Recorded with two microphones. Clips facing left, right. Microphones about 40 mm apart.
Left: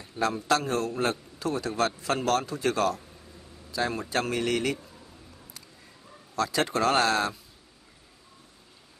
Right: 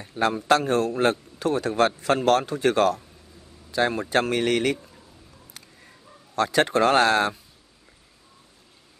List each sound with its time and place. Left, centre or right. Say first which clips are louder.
0.3 s a man's voice: right 6 dB; right
6.3 s a man's voice: right 6 dB; right